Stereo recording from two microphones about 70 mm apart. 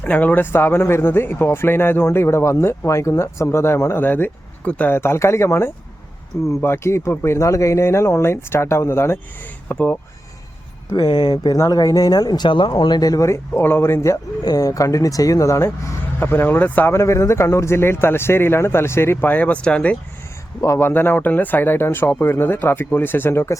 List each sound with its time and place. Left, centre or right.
0.0 s speech: left
4.6 s speech: centre
4.9 s speech: left
9.6 s speech: left
10.9 s speech: left
11.5 s speech: left
13.5 s speech: left
14.4 s speech: left
16.9 s speech: left; by 20.0 s centre
20.7 s speech: left